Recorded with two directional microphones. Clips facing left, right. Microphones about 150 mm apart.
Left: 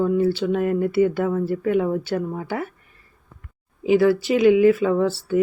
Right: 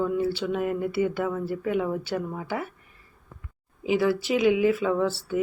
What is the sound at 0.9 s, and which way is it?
Speech, 45° left (ahead or behind).